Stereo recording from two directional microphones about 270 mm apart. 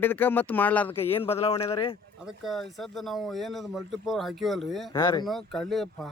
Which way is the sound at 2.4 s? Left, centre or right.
Centre.